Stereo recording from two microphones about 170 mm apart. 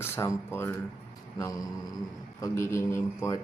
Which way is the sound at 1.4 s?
20° left (ahead or behind).